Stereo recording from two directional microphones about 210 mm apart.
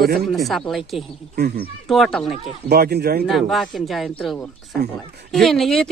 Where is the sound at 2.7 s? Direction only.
50° right (ahead or behind).